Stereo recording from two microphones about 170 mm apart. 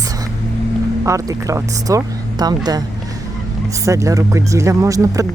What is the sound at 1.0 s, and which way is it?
Speech, 20° right (ahead or behind).